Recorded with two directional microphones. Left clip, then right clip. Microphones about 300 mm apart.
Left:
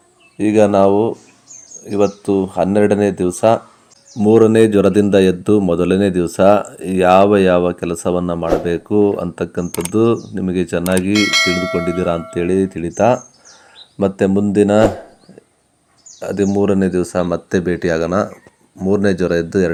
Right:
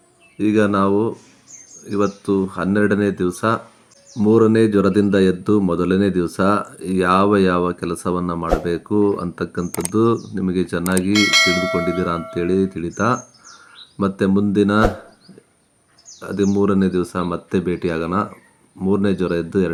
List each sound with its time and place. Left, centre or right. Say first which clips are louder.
0.3 s bell: left 5 dB; centre
2.7 s bell: left 3 dB; centre
4.2 s speech: left 4 dB; centre
11.1 s bell: right 1 dB; centre
14.3 s bell: left 3 dB; centre
16.2 s speech: left 3 dB; centre